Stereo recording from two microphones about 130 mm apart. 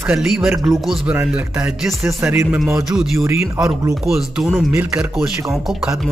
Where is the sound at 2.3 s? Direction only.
20° right (ahead or behind).